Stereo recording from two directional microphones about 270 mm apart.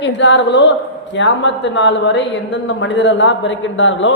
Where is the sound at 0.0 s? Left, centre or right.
Left.